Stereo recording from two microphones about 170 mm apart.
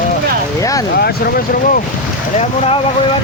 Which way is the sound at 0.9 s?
65° left (ahead or behind).